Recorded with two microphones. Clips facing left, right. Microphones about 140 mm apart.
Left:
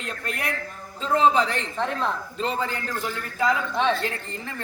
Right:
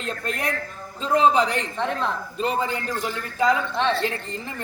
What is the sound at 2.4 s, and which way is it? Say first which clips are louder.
A man's voice: right 4 dB; 15° right (ahead or behind).